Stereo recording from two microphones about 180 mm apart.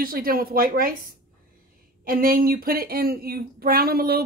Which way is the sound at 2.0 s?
50° right (ahead or behind).